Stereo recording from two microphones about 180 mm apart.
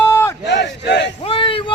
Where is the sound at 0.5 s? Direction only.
75° left (ahead or behind).